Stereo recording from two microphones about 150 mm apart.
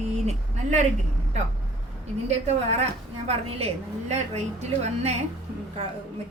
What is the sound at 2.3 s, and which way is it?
A woman's voice, 45° right (ahead or behind).